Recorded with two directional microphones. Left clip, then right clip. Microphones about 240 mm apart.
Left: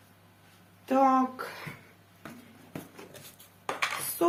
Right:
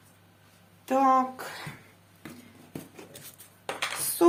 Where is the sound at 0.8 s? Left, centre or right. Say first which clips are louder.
Right 1 dB; right.